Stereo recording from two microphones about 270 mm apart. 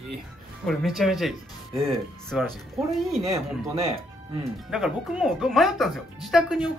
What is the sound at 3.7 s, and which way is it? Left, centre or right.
Speech, right.